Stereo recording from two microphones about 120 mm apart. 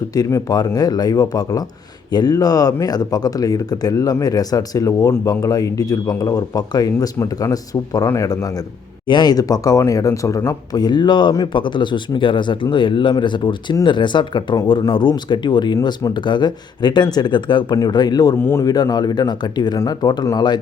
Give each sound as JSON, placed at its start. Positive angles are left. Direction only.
{"t": 0.1, "sound": "speech", "side_deg": 30}
{"t": 9.0, "sound": "speech", "side_deg": 35}